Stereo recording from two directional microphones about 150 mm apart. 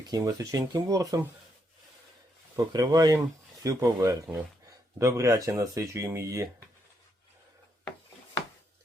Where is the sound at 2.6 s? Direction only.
20° right (ahead or behind).